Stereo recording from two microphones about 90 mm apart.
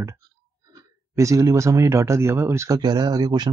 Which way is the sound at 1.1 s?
35° right (ahead or behind).